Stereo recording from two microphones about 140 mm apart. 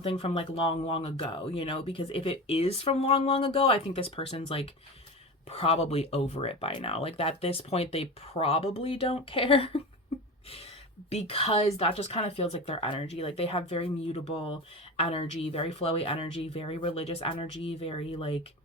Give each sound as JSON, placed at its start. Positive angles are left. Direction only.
{"t": 0.0, "sound": "speech", "side_deg": 40}
{"t": 11.1, "sound": "speech", "side_deg": 45}